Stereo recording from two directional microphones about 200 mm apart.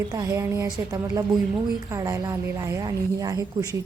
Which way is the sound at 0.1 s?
15° right (ahead or behind).